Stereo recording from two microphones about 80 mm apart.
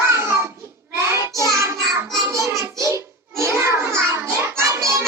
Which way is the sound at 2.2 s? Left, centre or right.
Right.